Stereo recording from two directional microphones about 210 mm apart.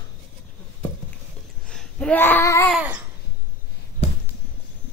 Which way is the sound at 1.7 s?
5° left (ahead or behind).